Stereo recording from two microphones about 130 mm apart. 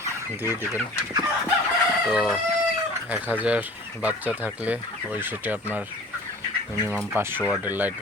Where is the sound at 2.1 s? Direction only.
5° right (ahead or behind).